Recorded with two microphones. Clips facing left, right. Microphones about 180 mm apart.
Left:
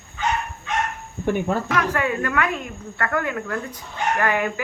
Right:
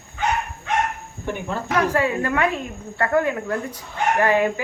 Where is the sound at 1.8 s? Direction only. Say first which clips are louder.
Right 2 dB; 30° right (ahead or behind).